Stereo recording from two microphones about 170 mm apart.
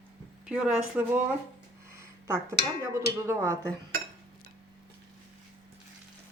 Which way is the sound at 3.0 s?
15° right (ahead or behind).